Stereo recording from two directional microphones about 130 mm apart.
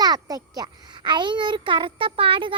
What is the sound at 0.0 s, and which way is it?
A child's voice, 30° right (ahead or behind).